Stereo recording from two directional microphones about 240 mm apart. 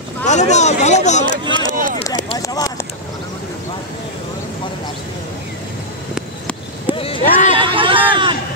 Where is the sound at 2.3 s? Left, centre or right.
Centre.